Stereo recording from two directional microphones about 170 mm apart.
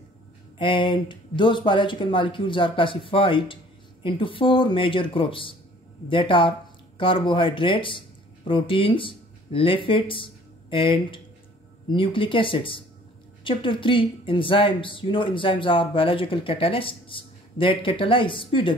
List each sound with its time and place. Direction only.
0.6 s speech: 30° left (ahead or behind)